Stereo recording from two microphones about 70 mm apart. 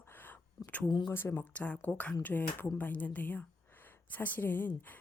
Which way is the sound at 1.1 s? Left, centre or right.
Left.